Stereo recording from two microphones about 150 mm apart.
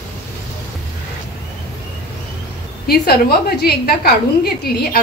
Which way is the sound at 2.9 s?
90° left.